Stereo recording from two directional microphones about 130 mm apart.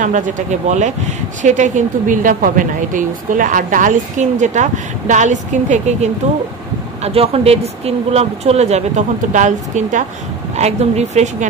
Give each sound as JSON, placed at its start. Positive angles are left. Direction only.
{"t": 0.0, "sound": "speech", "side_deg": -75}
{"t": 7.0, "sound": "speech", "side_deg": -50}
{"t": 10.5, "sound": "speech", "side_deg": -55}